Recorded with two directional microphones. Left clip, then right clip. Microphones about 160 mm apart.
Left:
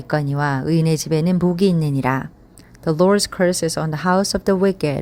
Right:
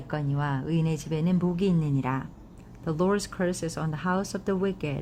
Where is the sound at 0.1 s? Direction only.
35° left (ahead or behind).